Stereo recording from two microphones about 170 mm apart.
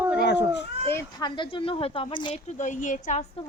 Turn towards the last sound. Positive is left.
turn(degrees=45)  # may be behind; listen again after turning